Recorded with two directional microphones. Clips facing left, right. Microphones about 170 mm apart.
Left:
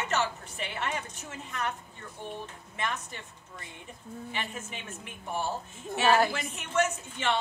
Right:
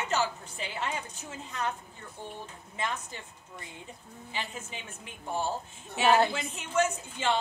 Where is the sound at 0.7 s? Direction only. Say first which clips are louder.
Even; 15° right (ahead or behind).